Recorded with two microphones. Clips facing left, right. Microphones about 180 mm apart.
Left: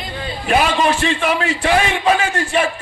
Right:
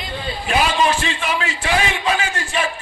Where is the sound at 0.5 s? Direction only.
50° left (ahead or behind).